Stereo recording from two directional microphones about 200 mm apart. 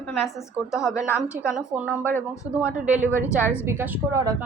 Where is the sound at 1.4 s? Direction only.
5° right (ahead or behind).